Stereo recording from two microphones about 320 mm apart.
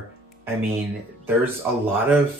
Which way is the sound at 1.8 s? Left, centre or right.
Centre.